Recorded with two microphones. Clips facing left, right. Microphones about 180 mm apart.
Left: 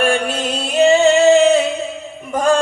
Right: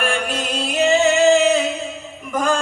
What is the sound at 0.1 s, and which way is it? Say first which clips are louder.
Music: left 4 dB; 30° left (ahead or behind).